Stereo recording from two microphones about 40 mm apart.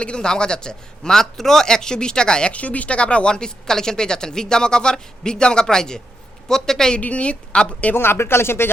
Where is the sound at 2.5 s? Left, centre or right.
Left; by 6.9 s centre.